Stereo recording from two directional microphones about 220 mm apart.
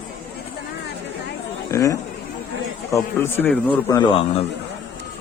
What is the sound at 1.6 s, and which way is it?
Speech, 15° left (ahead or behind).